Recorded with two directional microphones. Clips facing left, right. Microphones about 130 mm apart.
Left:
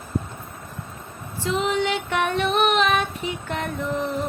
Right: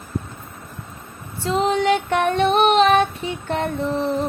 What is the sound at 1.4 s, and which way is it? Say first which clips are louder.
Female singing: right 4 dB; 35° right (ahead or behind).